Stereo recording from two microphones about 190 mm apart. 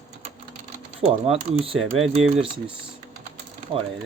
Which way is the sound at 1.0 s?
35° right (ahead or behind).